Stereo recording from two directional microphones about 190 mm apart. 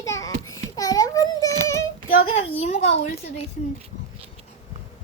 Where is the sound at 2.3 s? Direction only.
35° left (ahead or behind).